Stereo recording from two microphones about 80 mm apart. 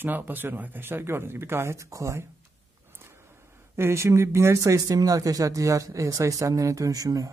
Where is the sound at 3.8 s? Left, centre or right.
Right.